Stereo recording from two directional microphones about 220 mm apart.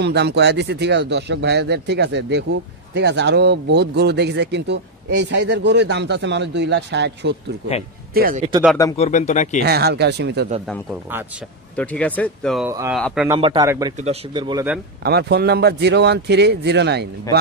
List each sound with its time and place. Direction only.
0.0 s speech: 50° right (ahead or behind)
8.9 s speech: 30° left (ahead or behind)
9.6 s speech: 45° right (ahead or behind)
11.7 s speech: 5° left (ahead or behind)
12.6 s speech: 10° right (ahead or behind)
13.4 s speech: 20° right (ahead or behind)
15.0 s speech: 50° right (ahead or behind)